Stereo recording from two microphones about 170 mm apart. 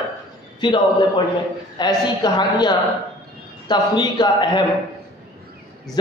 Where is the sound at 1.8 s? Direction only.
25° left (ahead or behind).